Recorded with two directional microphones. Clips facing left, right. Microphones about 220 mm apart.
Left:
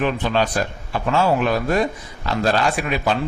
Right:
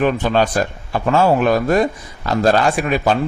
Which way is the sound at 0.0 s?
45° right (ahead or behind).